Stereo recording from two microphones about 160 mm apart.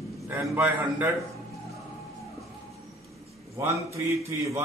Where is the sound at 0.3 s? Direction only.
15° right (ahead or behind).